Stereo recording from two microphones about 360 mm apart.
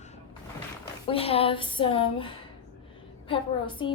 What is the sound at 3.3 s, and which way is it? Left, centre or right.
Speech, centre.